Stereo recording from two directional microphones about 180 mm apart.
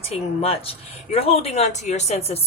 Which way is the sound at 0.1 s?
35° left (ahead or behind).